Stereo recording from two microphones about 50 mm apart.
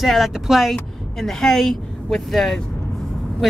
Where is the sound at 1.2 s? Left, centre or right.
Centre.